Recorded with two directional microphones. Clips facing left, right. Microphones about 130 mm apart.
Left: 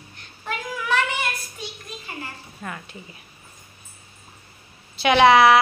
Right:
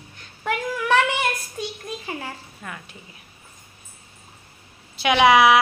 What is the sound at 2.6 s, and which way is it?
Speech, centre (ahead or behind).